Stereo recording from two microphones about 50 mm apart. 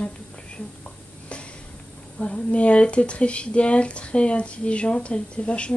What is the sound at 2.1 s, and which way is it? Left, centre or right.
Speech, left.